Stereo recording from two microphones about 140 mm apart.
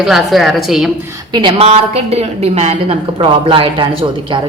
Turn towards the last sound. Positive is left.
turn(degrees=-35)  # may be behind; listen again after turning